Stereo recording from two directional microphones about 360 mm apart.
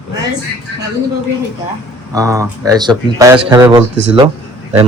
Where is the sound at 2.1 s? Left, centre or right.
Centre.